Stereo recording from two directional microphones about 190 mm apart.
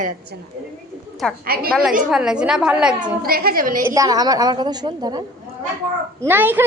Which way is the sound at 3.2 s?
50° right (ahead or behind).